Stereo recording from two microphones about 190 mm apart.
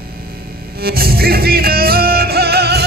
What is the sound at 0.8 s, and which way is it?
Music, 55° right (ahead or behind).